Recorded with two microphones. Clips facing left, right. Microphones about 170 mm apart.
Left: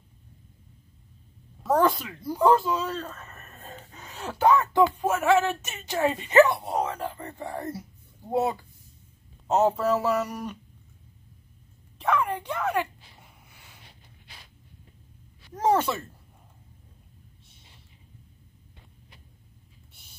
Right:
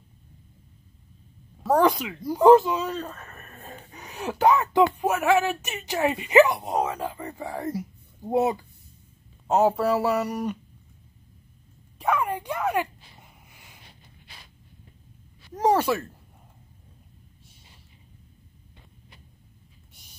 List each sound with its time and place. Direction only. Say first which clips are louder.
1.7 s speech: right 2 dB; 15° right (ahead or behind)
12.0 s speech: even; 10° right (ahead or behind)
15.6 s speech: right 1 dB; 10° right (ahead or behind)